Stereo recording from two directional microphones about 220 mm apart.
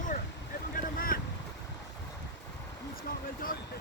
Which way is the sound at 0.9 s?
40° left (ahead or behind).